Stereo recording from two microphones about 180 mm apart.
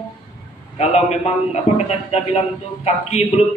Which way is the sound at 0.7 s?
35° left (ahead or behind).